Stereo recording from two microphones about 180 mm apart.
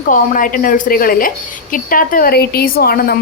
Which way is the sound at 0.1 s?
50° left (ahead or behind).